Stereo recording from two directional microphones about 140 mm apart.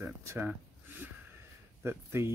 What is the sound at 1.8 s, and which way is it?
Speech, 15° right (ahead or behind).